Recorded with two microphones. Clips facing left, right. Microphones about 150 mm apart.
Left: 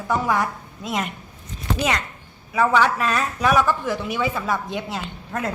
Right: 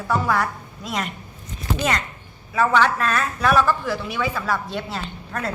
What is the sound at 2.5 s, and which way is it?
A woman's voice, 10° left (ahead or behind).